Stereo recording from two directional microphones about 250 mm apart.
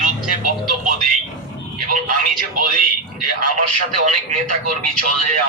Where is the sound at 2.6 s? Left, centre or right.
Right.